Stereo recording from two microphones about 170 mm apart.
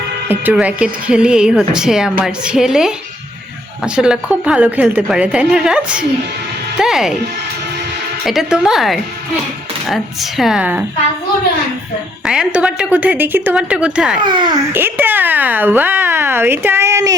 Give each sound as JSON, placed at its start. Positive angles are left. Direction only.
{"t": 0.3, "sound": "a woman's voice", "side_deg": -10}
{"t": 3.9, "sound": "speech", "side_deg": -5}
{"t": 8.2, "sound": "a woman's voice", "side_deg": 0}
{"t": 12.2, "sound": "speech", "side_deg": -5}
{"t": 14.2, "sound": "a child's voice", "side_deg": -25}
{"t": 14.7, "sound": "speech", "side_deg": -15}